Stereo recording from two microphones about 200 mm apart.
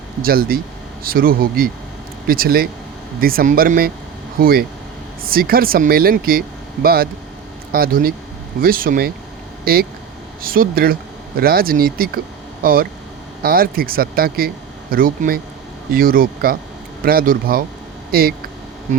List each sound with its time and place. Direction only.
0.2 s speech: 50° right (ahead or behind)